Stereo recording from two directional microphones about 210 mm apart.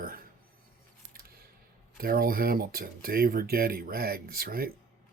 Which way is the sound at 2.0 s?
45° right (ahead or behind).